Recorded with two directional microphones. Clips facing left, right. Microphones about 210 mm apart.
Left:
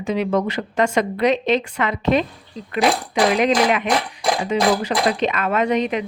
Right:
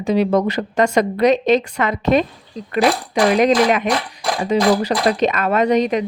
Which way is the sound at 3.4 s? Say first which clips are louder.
Right 3 dB; 40° right (ahead or behind).